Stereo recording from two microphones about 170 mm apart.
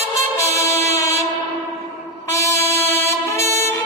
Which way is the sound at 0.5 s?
20° left (ahead or behind).